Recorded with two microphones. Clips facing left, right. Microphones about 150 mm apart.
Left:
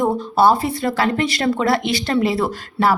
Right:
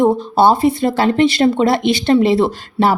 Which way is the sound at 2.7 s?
25° right (ahead or behind).